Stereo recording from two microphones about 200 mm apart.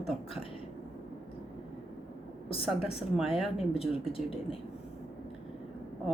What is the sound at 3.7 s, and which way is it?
Speech, 30° left (ahead or behind).